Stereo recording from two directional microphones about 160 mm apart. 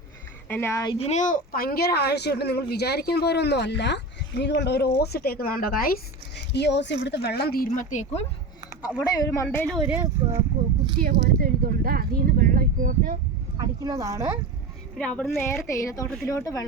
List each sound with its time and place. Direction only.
0.4 s speech: 15° left (ahead or behind)
0.9 s speech: 45° left (ahead or behind)
9.0 s speech: 25° left (ahead or behind)
9.9 s speech: 15° right (ahead or behind)
11.0 s speech: 65° right (ahead or behind)
13.6 s speech: 20° right (ahead or behind)
14.9 s speech: 5° left (ahead or behind)
15.6 s speech: 20° left (ahead or behind)